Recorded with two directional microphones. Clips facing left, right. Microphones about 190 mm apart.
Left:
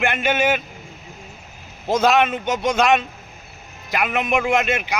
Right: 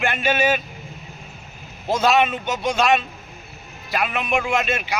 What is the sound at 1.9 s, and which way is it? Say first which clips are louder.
Speech: left 1 dB; 15° left (ahead or behind).